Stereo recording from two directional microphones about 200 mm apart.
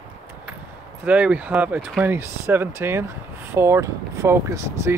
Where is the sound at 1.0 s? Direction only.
5° right (ahead or behind).